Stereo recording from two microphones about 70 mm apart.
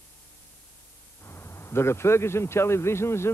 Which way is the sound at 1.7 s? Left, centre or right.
Left.